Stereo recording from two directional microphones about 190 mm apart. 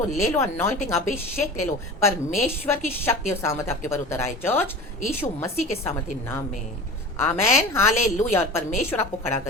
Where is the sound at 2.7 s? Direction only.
10° left (ahead or behind).